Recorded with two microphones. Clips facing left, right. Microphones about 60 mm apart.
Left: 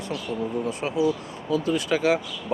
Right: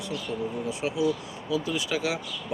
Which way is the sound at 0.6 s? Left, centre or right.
Left.